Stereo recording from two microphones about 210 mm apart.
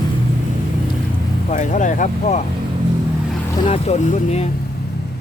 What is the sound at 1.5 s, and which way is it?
Speech, 35° left (ahead or behind).